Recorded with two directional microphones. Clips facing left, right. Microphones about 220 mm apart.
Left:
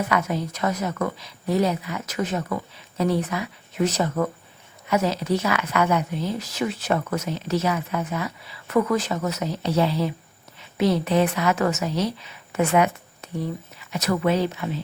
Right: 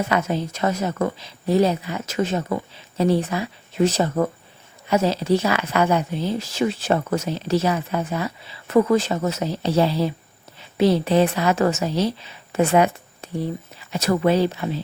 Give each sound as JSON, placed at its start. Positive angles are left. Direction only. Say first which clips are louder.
{"t": 0.0, "sound": "a woman's voice", "louder": "right 2 dB", "side_deg": -25}